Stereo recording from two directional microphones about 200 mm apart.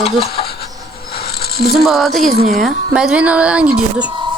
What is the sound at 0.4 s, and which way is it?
Insect, 25° left (ahead or behind).